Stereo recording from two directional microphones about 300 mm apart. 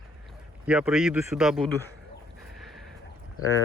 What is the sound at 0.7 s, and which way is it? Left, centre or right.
Speech, centre.